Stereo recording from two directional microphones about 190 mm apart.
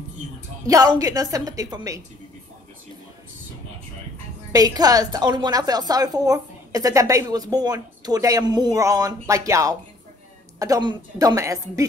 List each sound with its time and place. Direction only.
0.7 s a woman's voice: 20° right (ahead or behind)
4.5 s a woman's voice: 20° right (ahead or behind)